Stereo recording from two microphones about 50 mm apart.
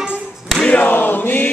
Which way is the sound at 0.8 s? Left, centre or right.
Left.